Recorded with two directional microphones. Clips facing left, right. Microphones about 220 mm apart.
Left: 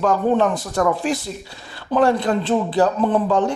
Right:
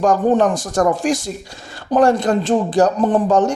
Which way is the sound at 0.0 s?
45° right (ahead or behind).